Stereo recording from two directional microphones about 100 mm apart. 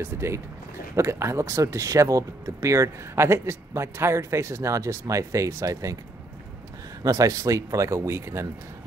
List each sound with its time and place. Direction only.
0.0 s speech: 25° right (ahead or behind)
7.0 s speech: 35° right (ahead or behind)